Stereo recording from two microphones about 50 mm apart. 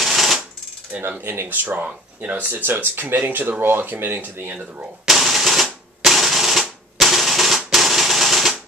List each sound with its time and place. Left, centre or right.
0.0 s a sound: centre
1.2 s speech: right
5.0 s typewriter: centre